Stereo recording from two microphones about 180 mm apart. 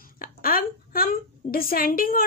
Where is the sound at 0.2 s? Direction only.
55° left (ahead or behind).